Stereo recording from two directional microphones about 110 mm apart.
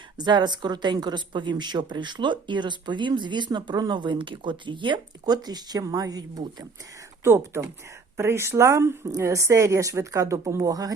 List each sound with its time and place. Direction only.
0.2 s a woman's voice: 40° right (ahead or behind)
7.3 s speech: 25° right (ahead or behind)